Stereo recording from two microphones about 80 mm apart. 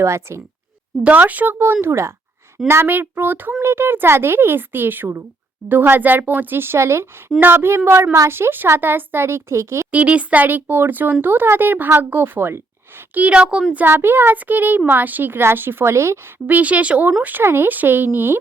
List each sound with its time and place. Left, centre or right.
0.0 s speech: right
1.0 s speech: right
9.9 s speech: centre
13.7 s speech: right
16.5 s speech: centre
17.2 s speech: right